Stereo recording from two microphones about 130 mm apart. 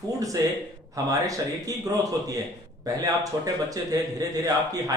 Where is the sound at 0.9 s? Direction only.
25° right (ahead or behind).